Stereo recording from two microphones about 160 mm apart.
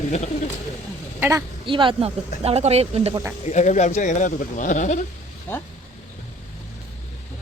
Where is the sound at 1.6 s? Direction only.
30° right (ahead or behind).